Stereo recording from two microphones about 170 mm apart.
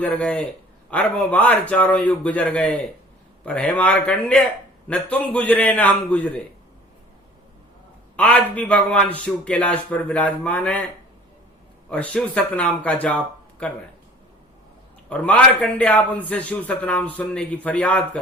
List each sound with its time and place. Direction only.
0.0 s a man's voice: 10° left (ahead or behind)
8.1 s a man's voice: 5° left (ahead or behind)
11.9 s a man's voice: 5° left (ahead or behind)
15.1 s a man's voice: 10° left (ahead or behind)